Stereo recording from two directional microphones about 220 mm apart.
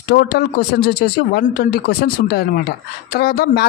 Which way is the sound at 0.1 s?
45° left (ahead or behind).